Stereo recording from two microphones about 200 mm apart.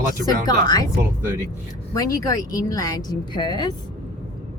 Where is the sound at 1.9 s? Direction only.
15° left (ahead or behind).